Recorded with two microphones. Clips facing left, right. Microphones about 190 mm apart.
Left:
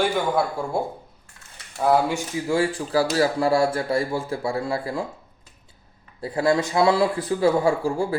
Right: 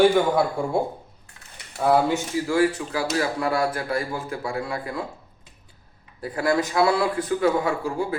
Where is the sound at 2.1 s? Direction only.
20° left (ahead or behind).